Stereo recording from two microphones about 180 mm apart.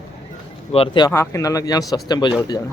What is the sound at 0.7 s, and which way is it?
Speech, 30° left (ahead or behind).